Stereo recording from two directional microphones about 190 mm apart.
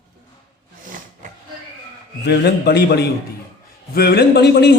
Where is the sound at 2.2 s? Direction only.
60° left (ahead or behind).